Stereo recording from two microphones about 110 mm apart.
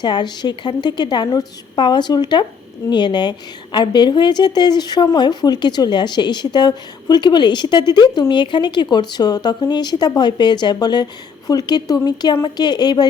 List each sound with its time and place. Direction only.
0.0 s a woman's voice: 40° left (ahead or behind)